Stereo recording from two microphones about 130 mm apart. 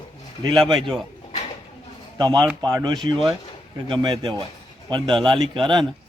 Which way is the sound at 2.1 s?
35° right (ahead or behind).